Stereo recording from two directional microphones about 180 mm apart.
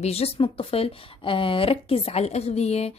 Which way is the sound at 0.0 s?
35° left (ahead or behind).